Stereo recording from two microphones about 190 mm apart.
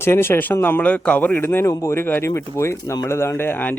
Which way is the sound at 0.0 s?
10° left (ahead or behind).